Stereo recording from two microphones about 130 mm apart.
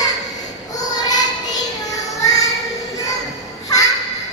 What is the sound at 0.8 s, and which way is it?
Child singing, 30° left (ahead or behind).